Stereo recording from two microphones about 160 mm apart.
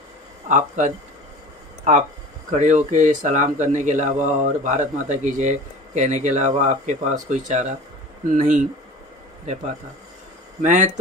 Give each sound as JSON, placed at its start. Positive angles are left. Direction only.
{"t": 0.5, "sound": "a man's voice", "side_deg": -50}
{"t": 2.5, "sound": "a man's voice", "side_deg": -50}
{"t": 10.6, "sound": "a man's voice", "side_deg": -50}